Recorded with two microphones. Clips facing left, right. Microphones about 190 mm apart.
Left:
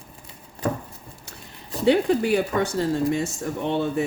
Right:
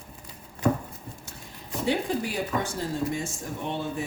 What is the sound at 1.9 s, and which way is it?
Speech, 65° left (ahead or behind).